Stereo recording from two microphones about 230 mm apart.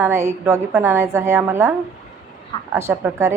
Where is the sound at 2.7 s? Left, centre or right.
Centre.